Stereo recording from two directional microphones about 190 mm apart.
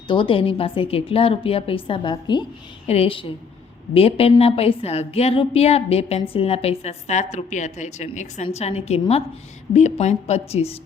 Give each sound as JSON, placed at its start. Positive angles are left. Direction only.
{"t": 0.1, "sound": "a woman's voice", "side_deg": 25}